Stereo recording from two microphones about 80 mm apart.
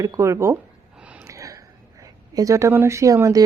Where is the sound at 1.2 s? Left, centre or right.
Right.